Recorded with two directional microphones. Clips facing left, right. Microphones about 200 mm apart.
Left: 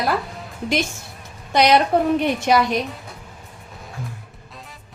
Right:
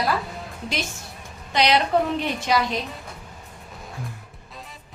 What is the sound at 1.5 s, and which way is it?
A woman's voice, 50° left (ahead or behind).